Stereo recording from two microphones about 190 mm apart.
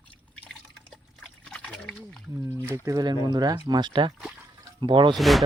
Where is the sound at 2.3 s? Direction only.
15° right (ahead or behind).